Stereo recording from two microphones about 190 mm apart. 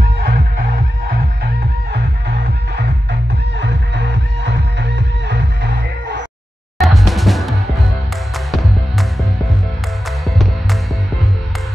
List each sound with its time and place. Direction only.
0.2 s music: 50° right (ahead or behind)
6.8 s music: centre (ahead or behind)
10.2 s music: centre (ahead or behind)